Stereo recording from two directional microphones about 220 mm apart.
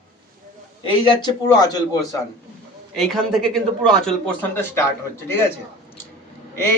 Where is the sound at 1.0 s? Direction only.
15° left (ahead or behind).